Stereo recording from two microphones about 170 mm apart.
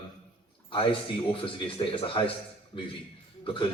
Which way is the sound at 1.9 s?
30° left (ahead or behind).